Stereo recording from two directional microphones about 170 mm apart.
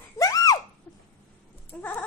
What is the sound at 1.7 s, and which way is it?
Speech, 10° left (ahead or behind).